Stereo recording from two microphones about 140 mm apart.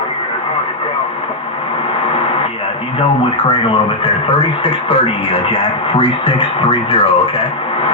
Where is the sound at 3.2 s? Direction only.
40° left (ahead or behind).